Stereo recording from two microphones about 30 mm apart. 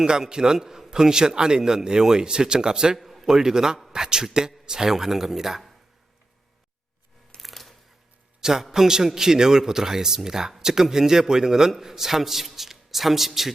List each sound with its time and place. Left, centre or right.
0.0 s a man's voice: right
3.0 s a sound: centre
3.2 s a man's voice: centre
4.9 s a man's voice: centre
7.3 s a sound: centre
8.4 s a man's voice: centre